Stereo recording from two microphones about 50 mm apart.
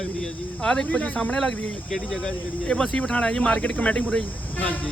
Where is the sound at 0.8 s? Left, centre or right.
Left.